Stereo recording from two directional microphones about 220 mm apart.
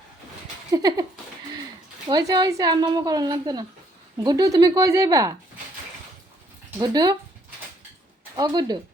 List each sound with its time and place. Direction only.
0.7 s speech: 15° right (ahead or behind)
2.0 s speech: 20° right (ahead or behind)
6.7 s speech: 20° right (ahead or behind)
8.4 s speech: 15° right (ahead or behind)